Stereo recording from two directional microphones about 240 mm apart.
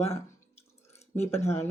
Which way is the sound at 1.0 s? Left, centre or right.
Left.